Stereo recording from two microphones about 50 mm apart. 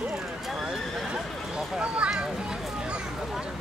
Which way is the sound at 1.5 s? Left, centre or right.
Right.